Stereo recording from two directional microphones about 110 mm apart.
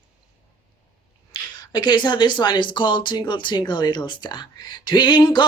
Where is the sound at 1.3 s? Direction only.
40° left (ahead or behind).